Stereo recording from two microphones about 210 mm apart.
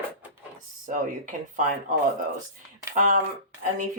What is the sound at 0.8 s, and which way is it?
Speech, 40° right (ahead or behind).